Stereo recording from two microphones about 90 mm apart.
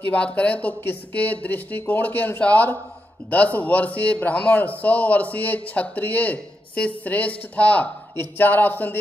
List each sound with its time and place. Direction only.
0.1 s a man's voice: 15° left (ahead or behind)